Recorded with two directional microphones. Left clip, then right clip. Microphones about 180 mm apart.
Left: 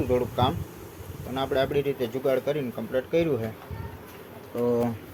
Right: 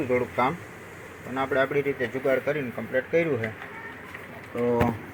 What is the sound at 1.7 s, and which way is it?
Speech, 20° left (ahead or behind).